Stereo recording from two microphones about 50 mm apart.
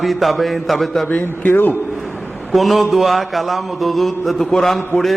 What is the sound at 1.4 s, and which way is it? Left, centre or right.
Speech, left.